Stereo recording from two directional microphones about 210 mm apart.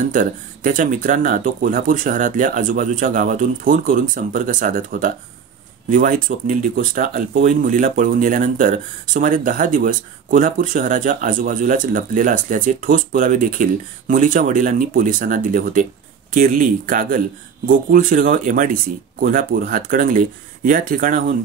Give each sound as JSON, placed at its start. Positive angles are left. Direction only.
{"t": 0.1, "sound": "speech", "side_deg": -40}